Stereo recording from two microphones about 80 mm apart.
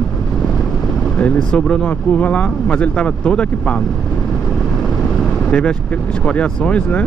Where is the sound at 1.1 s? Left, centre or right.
Centre.